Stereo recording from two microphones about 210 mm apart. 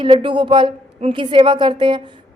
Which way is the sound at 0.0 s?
25° right (ahead or behind).